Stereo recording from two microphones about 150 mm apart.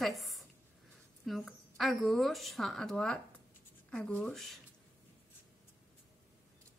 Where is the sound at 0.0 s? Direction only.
Centre (ahead or behind).